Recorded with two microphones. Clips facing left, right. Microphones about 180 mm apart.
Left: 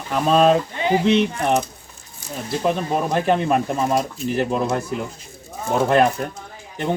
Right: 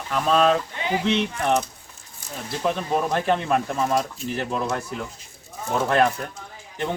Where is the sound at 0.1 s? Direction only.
15° left (ahead or behind).